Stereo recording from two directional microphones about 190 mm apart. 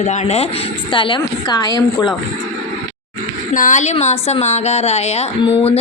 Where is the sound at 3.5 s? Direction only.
40° left (ahead or behind).